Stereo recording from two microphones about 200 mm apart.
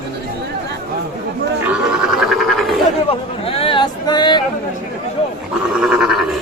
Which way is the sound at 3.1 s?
30° left (ahead or behind).